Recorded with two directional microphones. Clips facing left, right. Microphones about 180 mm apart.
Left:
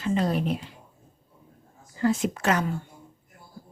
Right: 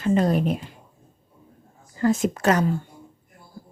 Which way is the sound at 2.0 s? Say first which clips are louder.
Right 3 dB; 45° right (ahead or behind).